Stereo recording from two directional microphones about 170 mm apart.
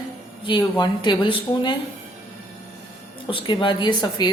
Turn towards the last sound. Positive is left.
turn(degrees=25)  # may be behind; listen again after turning